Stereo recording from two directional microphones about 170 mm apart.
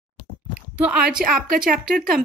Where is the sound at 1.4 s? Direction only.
55° right (ahead or behind).